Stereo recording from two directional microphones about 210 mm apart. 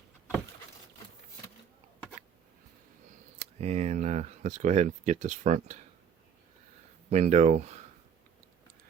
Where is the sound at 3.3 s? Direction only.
30° right (ahead or behind).